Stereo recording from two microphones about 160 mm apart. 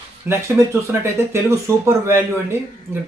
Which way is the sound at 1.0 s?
15° right (ahead or behind).